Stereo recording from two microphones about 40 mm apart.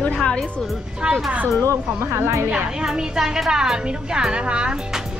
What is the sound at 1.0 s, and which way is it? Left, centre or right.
Speech, right.